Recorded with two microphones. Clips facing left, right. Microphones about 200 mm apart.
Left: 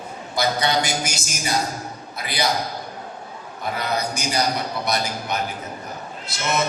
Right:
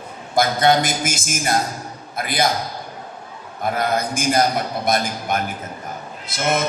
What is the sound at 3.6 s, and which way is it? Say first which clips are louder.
A man's voice: right 4 dB; 50° right (ahead or behind).